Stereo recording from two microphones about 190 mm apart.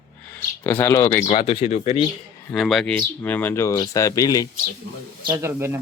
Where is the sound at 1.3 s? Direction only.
30° left (ahead or behind).